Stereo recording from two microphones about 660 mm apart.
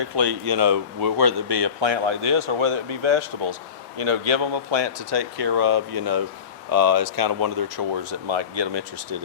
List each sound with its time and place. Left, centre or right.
0.2 s speech: right
0.5 s speech: right